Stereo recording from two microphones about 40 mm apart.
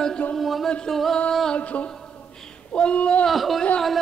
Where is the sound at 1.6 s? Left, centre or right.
Left.